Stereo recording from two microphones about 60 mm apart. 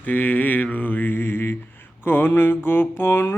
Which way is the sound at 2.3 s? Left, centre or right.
Left.